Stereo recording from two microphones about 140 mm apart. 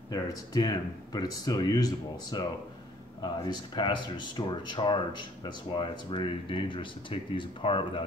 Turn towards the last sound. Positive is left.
turn(degrees=40)  # may be behind; listen again after turning